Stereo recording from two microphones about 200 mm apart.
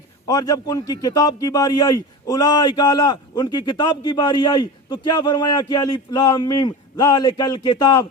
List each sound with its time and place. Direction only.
0.3 s a man's voice: 20° left (ahead or behind)